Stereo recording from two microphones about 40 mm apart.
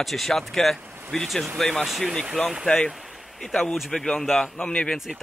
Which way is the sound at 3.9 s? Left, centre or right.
Centre.